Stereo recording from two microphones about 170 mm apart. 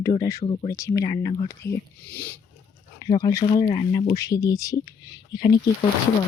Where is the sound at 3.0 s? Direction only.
25° left (ahead or behind).